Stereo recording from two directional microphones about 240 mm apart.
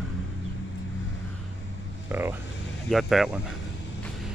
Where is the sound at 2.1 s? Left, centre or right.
Centre.